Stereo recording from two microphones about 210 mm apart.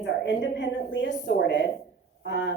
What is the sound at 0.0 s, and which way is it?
A woman's voice, 55° left (ahead or behind).